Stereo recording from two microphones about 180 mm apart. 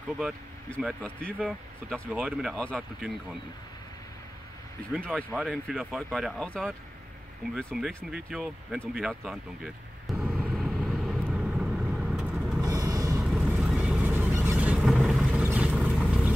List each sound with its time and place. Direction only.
1.0 s speech: 5° left (ahead or behind)
5.0 s speech: centre (ahead or behind)
10.0 s vehicle: 5° right (ahead or behind)
12.6 s a sound: 20° right (ahead or behind)
13.2 s vehicle: 5° right (ahead or behind)